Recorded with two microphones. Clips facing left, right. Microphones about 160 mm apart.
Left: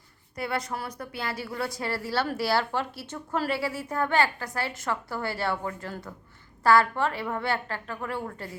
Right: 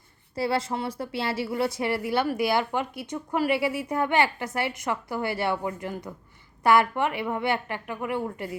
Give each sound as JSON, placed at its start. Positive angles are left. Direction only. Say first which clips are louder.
{"t": 0.3, "sound": "a woman's voice", "louder": "right 5 dB", "side_deg": -30}